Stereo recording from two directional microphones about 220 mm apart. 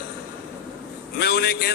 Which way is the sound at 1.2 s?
45° left (ahead or behind).